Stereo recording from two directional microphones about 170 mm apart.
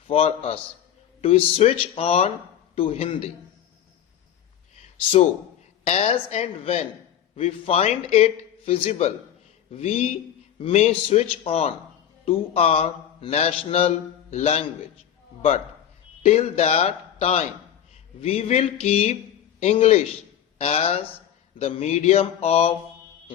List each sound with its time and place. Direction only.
0.1 s a man's voice: 35° left (ahead or behind)
5.8 s a man's voice: 40° left (ahead or behind)